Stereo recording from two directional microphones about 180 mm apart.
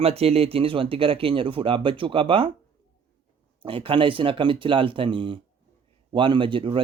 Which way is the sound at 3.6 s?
30° right (ahead or behind).